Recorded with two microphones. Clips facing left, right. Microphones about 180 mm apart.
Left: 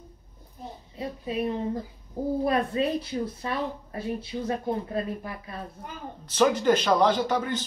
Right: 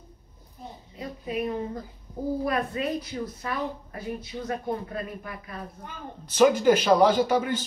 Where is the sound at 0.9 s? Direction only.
25° left (ahead or behind).